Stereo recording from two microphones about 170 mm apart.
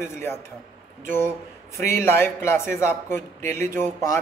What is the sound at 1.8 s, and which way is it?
Speech, 15° left (ahead or behind).